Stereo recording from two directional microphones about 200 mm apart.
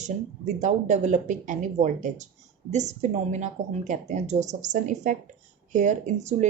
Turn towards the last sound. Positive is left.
turn(degrees=-35)  # may be behind; listen again after turning